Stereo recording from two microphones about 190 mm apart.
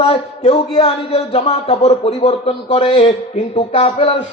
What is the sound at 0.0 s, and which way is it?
A man's voice, 30° left (ahead or behind).